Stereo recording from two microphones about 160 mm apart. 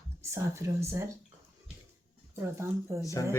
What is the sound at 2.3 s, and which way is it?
Speech, 15° right (ahead or behind).